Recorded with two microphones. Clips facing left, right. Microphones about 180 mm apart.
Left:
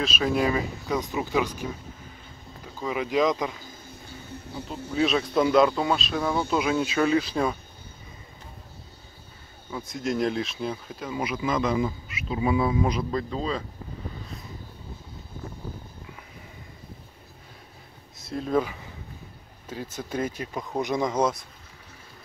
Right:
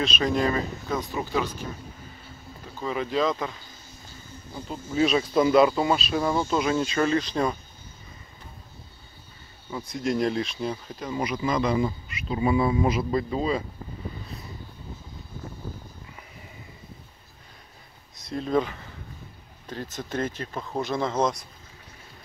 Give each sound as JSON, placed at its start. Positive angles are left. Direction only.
{"t": 0.0, "sound": "speech", "side_deg": 5}
{"t": 2.8, "sound": "speech", "side_deg": 10}
{"t": 3.9, "sound": "train", "side_deg": 60}
{"t": 4.9, "sound": "speech", "side_deg": 0}
{"t": 9.7, "sound": "speech", "side_deg": 0}
{"t": 18.1, "sound": "speech", "side_deg": 5}